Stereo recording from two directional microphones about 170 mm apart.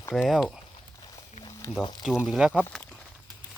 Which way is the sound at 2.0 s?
Centre (ahead or behind).